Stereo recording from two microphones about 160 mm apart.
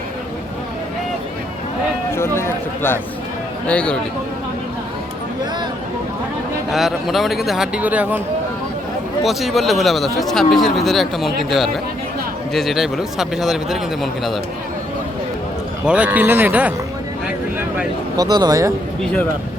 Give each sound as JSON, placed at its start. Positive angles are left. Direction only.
{"t": 2.1, "sound": "a sound", "side_deg": 15}
{"t": 3.7, "sound": "speech", "side_deg": 5}
{"t": 6.7, "sound": "speech", "side_deg": 0}
{"t": 9.2, "sound": "speech", "side_deg": 0}
{"t": 15.9, "sound": "speech", "side_deg": -10}
{"t": 18.2, "sound": "speech", "side_deg": -25}